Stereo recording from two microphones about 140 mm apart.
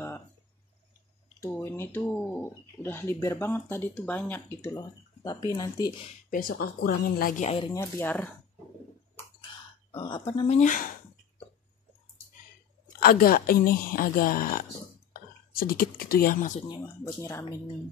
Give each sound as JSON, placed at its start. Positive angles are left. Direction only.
{"t": 1.6, "sound": "speech", "side_deg": 15}
{"t": 6.3, "sound": "a woman's voice", "side_deg": 90}
{"t": 7.4, "sound": "speech", "side_deg": 40}
{"t": 7.7, "sound": "speech", "side_deg": 15}
{"t": 9.5, "sound": "burping", "side_deg": 35}
{"t": 9.9, "sound": "speech", "side_deg": 35}
{"t": 10.4, "sound": "speech", "side_deg": 55}
{"t": 13.0, "sound": "a woman's voice", "side_deg": 90}
{"t": 17.0, "sound": "speech", "side_deg": 20}